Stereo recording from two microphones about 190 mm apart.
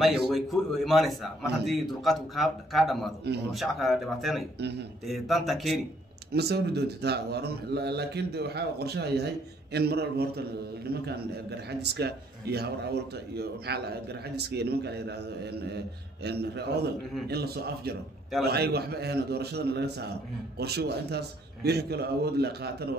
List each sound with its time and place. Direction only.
0.0 s a man's voice: centre (ahead or behind)
6.3 s a man's voice: 60° right (ahead or behind)